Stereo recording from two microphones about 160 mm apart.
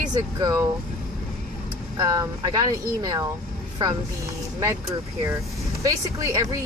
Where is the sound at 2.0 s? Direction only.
20° right (ahead or behind).